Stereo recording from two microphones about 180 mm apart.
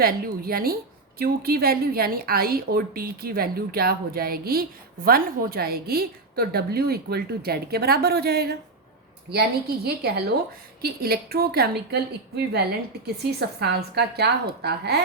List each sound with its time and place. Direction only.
0.0 s a woman's voice: 55° right (ahead or behind)